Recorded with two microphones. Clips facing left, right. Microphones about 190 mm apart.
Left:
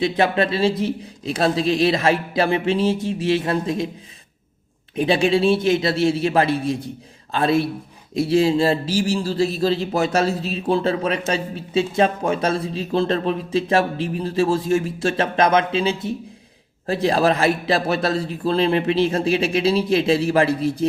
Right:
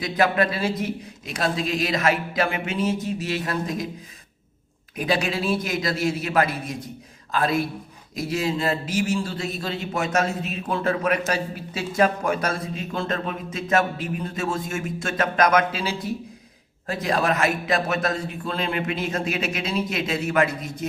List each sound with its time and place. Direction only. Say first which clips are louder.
0.0 s a man's voice: left 3 dB; 25° left (ahead or behind)
4.9 s a man's voice: left 7 dB; 25° left (ahead or behind)